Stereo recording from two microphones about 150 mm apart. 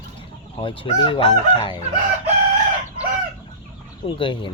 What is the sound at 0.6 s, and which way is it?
Speech, 35° left (ahead or behind).